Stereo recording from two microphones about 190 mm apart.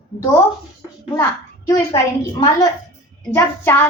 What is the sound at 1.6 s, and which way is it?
Speech, 20° left (ahead or behind).